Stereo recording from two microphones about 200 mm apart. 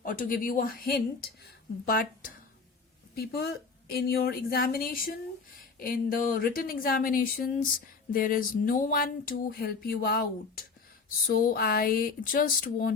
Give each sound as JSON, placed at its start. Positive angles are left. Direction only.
{"t": 0.0, "sound": "speech", "side_deg": 45}